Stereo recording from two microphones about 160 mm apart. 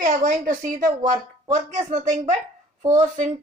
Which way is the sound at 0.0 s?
55° right (ahead or behind).